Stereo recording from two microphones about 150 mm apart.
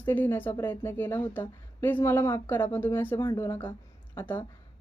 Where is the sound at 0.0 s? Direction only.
15° left (ahead or behind).